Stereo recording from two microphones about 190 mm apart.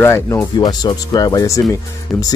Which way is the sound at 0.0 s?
15° left (ahead or behind).